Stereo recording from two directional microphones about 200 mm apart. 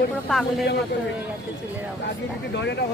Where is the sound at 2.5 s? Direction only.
60° left (ahead or behind).